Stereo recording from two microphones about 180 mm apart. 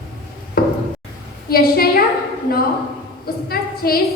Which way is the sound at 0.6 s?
55° left (ahead or behind).